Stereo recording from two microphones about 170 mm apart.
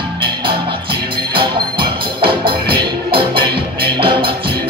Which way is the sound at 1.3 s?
30° right (ahead or behind).